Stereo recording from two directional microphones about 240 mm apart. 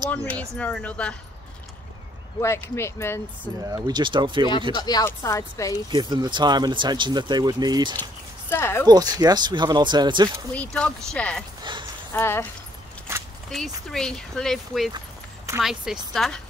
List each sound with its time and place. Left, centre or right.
0.1 s speech: centre
2.7 s speech: centre
3.6 s speech: centre
4.7 s speech: centre
5.9 s speech: centre
8.0 s a sound: centre
8.8 s speech: centre
10.5 s speech: centre
13.1 s a sound: centre
13.5 s speech: centre